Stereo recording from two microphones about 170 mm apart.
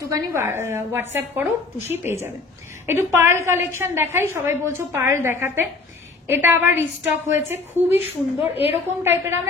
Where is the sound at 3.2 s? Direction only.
15° right (ahead or behind).